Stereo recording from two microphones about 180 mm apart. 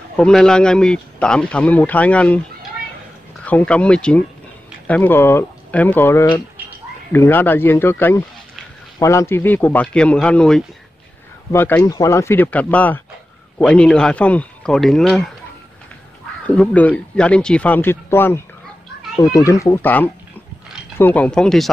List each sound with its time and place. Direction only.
0.1 s speech: 5° left (ahead or behind)
3.4 s speech: 5° left (ahead or behind)
16.4 s speech: 10° left (ahead or behind)